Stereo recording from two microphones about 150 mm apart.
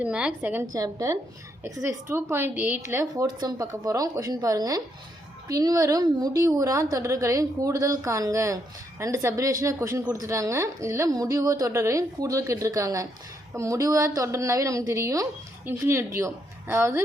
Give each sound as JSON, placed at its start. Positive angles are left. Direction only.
{"t": 0.0, "sound": "a woman's voice", "side_deg": -10}
{"t": 0.7, "sound": "speech", "side_deg": -20}